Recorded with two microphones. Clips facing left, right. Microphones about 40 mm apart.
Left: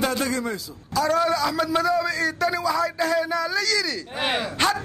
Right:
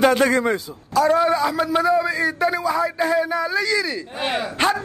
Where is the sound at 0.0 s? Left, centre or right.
Right.